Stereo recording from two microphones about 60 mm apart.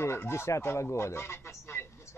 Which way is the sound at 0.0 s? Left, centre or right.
Left.